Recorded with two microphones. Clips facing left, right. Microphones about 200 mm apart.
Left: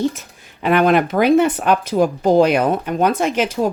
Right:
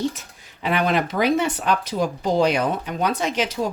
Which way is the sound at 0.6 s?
55° left (ahead or behind).